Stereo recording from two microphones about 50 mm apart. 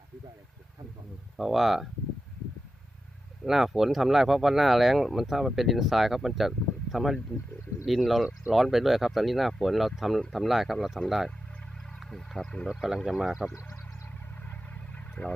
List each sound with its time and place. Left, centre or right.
1.4 s speech: centre
3.4 s speech: centre
12.6 s speech: centre
14.9 s vehicle: left